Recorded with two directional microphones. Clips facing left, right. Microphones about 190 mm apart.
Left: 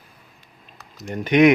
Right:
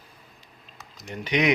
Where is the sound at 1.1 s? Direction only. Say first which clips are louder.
Left 10 dB; 55° left (ahead or behind).